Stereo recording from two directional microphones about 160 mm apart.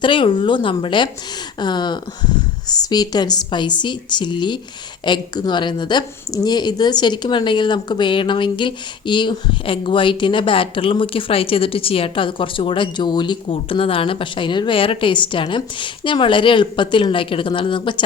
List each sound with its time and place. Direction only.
0.0 s a woman's voice: 30° left (ahead or behind)